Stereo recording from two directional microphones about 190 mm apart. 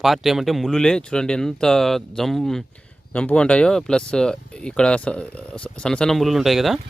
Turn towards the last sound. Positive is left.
turn(degrees=0)  # may be behind; listen again after turning